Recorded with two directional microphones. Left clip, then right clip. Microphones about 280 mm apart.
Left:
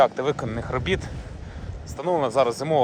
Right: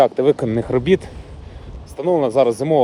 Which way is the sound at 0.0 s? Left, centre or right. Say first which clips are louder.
Right 6 dB; centre.